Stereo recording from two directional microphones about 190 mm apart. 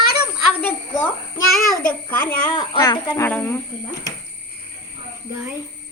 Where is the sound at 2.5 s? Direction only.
25° left (ahead or behind).